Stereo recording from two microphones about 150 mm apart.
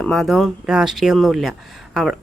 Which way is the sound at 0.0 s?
5° left (ahead or behind).